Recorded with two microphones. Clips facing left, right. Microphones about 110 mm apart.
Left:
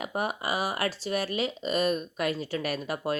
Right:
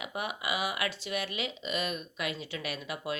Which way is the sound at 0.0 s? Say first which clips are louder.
Left 5 dB; 40° left (ahead or behind).